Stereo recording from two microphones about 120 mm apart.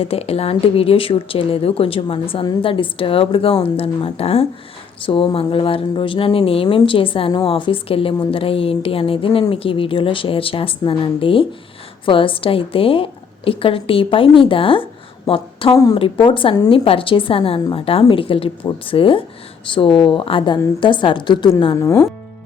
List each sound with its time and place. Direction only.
0.0 s speech: 55° left (ahead or behind); by 21.5 s 40° left (ahead or behind)
21.8 s speech: 25° left (ahead or behind)